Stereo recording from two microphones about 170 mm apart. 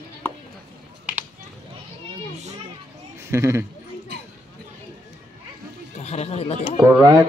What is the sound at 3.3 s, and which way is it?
Speech, 15° right (ahead or behind).